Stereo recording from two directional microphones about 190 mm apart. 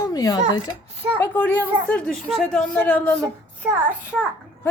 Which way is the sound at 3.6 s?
5° right (ahead or behind).